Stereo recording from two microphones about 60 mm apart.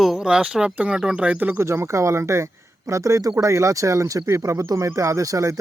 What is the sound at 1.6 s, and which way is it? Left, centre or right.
Speech, right.